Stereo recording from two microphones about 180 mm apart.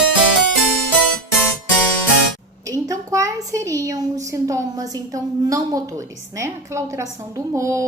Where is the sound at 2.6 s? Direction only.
20° right (ahead or behind).